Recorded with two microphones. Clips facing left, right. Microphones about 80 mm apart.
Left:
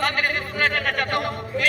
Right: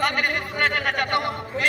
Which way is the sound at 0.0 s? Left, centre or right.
Centre.